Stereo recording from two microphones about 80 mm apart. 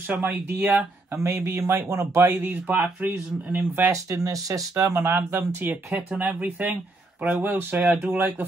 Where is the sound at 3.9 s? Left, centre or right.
Right.